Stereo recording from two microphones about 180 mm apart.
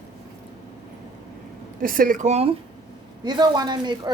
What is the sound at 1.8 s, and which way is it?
Speech, 50° right (ahead or behind).